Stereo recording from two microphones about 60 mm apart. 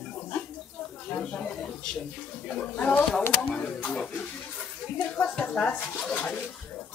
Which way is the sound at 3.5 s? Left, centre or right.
Left.